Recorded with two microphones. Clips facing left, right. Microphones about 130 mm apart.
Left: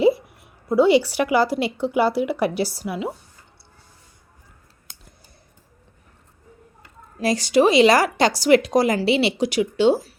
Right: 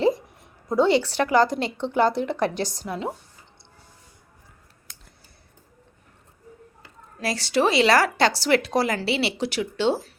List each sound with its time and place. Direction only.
0.0 s a woman's voice: 10° left (ahead or behind)
7.2 s speech: 15° left (ahead or behind)